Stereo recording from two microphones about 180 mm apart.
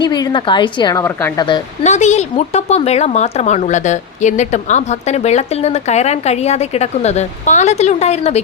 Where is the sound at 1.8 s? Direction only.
40° left (ahead or behind).